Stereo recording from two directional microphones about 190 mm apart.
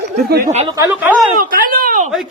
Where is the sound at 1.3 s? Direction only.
45° right (ahead or behind).